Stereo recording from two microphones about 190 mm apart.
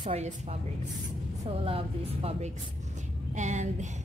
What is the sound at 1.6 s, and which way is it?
A woman's voice, 30° right (ahead or behind).